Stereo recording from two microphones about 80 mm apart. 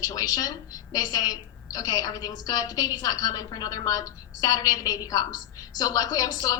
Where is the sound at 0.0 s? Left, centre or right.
Left.